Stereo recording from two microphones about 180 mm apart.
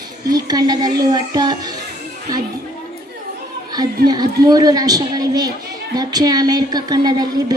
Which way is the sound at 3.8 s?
20° right (ahead or behind).